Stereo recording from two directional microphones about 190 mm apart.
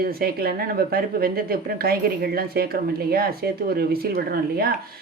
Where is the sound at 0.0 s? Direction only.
55° right (ahead or behind).